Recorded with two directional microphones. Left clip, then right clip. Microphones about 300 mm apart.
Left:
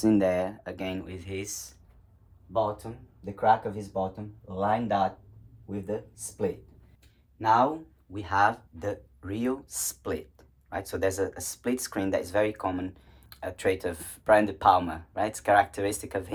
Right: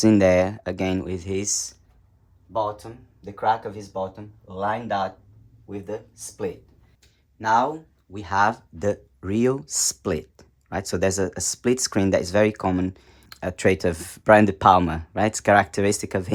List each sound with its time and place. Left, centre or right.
0.2 s speech: right
4.4 s speech: centre
7.3 s speech: right